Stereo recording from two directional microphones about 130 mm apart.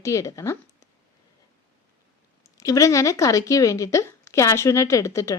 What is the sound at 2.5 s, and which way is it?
A woman's voice, 25° left (ahead or behind).